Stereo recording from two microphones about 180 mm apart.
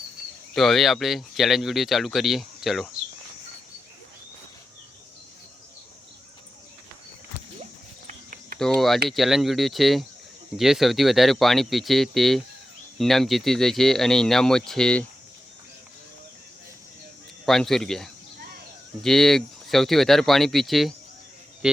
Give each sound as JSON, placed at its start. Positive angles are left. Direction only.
{"t": 0.5, "sound": "speech", "side_deg": 0}
{"t": 8.0, "sound": "cricket", "side_deg": -45}
{"t": 8.5, "sound": "speech", "side_deg": 0}
{"t": 17.4, "sound": "speech", "side_deg": 0}